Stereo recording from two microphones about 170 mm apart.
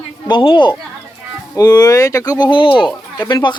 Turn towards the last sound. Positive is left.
turn(degrees=25)  # may be behind; listen again after turning